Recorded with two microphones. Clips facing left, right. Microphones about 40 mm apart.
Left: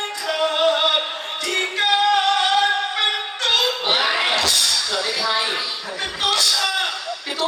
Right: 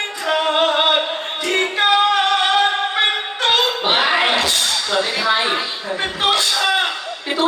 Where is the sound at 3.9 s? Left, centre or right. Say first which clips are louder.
Right 4 dB; right.